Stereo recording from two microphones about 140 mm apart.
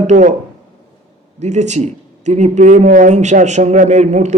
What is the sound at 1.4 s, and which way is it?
A man's voice, 55° right (ahead or behind).